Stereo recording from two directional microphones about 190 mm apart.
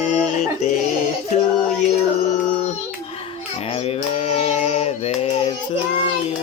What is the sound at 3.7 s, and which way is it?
Child singing, 30° left (ahead or behind).